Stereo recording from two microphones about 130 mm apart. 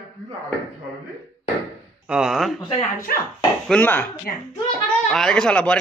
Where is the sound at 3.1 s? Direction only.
90° left.